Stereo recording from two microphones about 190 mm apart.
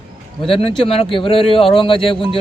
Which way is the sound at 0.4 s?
30° left (ahead or behind).